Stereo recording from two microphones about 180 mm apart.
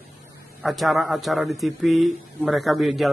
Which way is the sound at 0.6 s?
Centre (ahead or behind).